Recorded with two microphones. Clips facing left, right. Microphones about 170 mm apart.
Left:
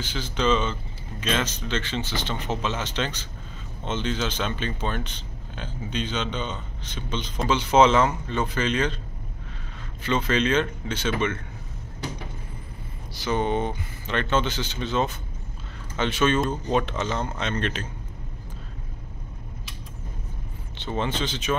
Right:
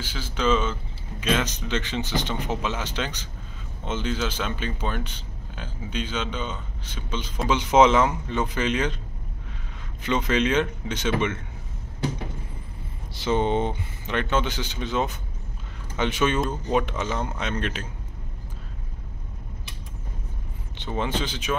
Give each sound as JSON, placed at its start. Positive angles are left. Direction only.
{"t": 0.0, "sound": "a man's voice", "side_deg": -5}
{"t": 10.0, "sound": "a man's voice", "side_deg": -15}
{"t": 13.1, "sound": "speech", "side_deg": -25}
{"t": 14.1, "sound": "a man's voice", "side_deg": -10}
{"t": 20.7, "sound": "a man's voice", "side_deg": -15}